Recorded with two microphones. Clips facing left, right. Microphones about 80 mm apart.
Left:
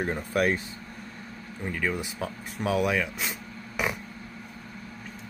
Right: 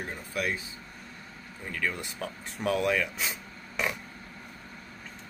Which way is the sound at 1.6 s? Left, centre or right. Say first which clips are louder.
Left 3 dB; centre.